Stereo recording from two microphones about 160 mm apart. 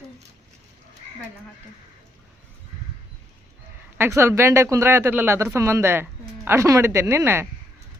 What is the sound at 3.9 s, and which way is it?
Speech, 15° right (ahead or behind).